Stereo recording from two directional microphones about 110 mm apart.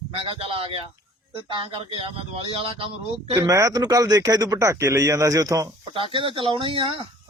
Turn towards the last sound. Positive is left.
turn(degrees=-50)  # may be behind; listen again after turning